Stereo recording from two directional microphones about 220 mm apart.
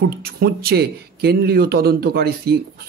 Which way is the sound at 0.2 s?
45° right (ahead or behind).